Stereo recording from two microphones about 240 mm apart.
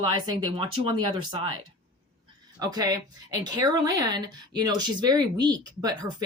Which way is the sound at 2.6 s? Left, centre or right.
Centre.